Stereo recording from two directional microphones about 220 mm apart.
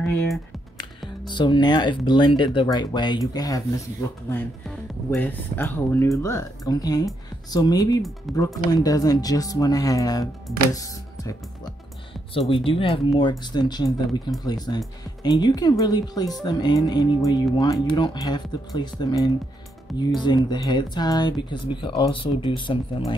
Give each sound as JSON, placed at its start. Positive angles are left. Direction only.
{"t": 0.0, "sound": "speech", "side_deg": 10}
{"t": 1.2, "sound": "speech", "side_deg": 20}
{"t": 4.3, "sound": "speech", "side_deg": 5}
{"t": 8.3, "sound": "speech", "side_deg": 0}
{"t": 8.7, "sound": "speech", "side_deg": 15}